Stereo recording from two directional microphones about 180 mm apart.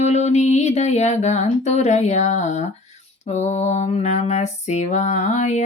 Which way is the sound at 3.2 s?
40° left (ahead or behind).